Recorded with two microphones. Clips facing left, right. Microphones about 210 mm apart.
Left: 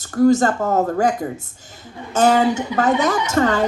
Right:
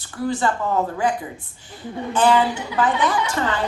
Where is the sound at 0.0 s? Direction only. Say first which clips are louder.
Left 9 dB; 45° left (ahead or behind).